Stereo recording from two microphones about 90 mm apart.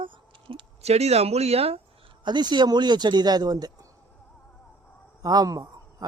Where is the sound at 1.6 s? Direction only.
90° right.